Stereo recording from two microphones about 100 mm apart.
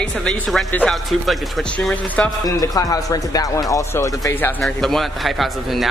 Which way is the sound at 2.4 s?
35° left (ahead or behind).